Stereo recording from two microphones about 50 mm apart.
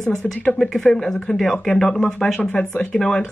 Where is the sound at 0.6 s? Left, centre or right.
Centre.